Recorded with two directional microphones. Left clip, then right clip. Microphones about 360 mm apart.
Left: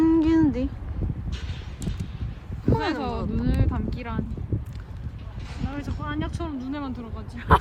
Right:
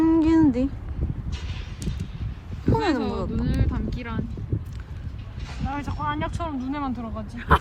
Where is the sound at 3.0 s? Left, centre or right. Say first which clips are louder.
Right 1 dB; left.